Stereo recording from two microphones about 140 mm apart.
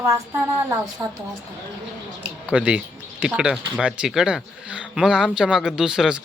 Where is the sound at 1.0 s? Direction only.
25° right (ahead or behind).